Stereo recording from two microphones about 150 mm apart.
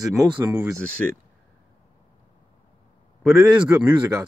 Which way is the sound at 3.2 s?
5° right (ahead or behind).